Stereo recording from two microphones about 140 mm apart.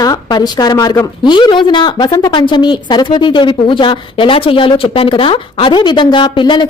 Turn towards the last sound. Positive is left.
turn(degrees=35)  # may be behind; listen again after turning